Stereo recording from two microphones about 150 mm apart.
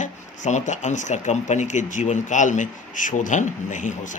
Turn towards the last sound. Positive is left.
turn(degrees=55)  # may be behind; listen again after turning